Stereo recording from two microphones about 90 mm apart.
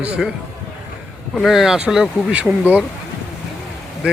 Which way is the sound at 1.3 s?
Centre (ahead or behind).